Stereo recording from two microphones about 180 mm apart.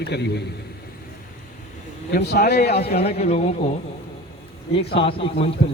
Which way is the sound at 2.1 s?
60° left (ahead or behind).